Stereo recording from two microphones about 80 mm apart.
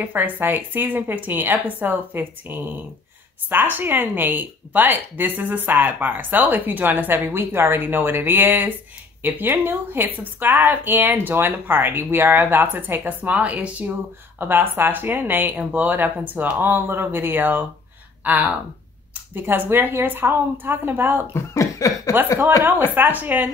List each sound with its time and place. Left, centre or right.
0.0 s speech: right
21.3 s cough: left
22.9 s speech: right